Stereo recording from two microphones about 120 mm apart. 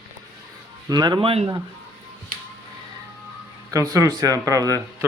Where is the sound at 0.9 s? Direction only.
35° right (ahead or behind); by 1.5 s 50° right (ahead or behind).